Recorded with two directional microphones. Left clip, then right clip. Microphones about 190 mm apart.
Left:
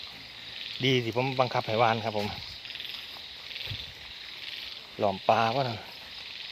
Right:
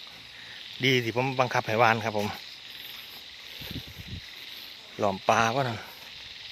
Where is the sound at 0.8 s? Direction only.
15° right (ahead or behind).